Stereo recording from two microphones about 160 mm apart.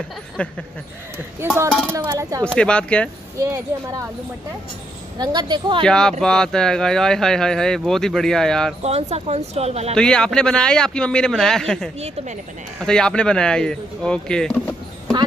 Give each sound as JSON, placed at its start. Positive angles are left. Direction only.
{"t": 0.4, "sound": "speech", "side_deg": 10}
{"t": 1.1, "sound": "a woman's voice", "side_deg": -15}
{"t": 2.4, "sound": "speech", "side_deg": 5}
{"t": 5.2, "sound": "a woman's voice", "side_deg": -25}
{"t": 5.9, "sound": "speech", "side_deg": 5}
{"t": 8.8, "sound": "speech", "side_deg": -40}
{"t": 9.9, "sound": "speech", "side_deg": 5}